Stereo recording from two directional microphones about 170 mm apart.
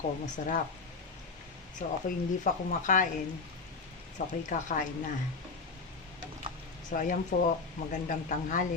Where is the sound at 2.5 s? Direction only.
50° left (ahead or behind).